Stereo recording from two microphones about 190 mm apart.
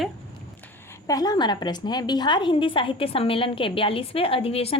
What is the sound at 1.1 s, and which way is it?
A woman's voice, 20° left (ahead or behind).